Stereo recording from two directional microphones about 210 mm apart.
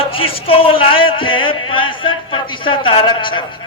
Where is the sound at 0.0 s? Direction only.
25° left (ahead or behind).